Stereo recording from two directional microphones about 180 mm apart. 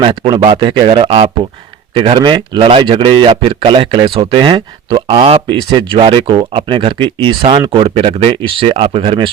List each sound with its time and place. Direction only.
0.0 s speech: 25° right (ahead or behind)